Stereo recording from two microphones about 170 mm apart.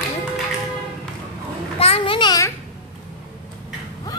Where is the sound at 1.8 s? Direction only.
35° left (ahead or behind).